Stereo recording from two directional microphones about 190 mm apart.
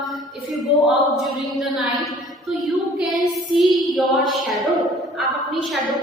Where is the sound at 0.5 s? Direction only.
Centre (ahead or behind).